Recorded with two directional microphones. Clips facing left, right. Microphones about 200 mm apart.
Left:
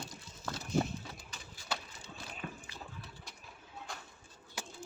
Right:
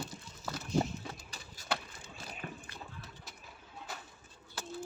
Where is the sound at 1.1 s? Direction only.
40° right (ahead or behind).